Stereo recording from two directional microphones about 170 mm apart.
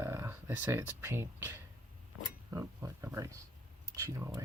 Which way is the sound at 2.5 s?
15° right (ahead or behind).